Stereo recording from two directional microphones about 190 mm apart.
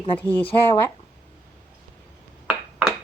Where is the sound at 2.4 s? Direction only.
5° right (ahead or behind).